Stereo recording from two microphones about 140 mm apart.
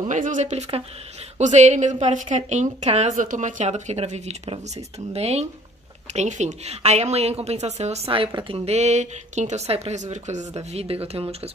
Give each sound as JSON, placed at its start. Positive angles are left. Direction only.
{"t": 0.1, "sound": "a woman's voice", "side_deg": -65}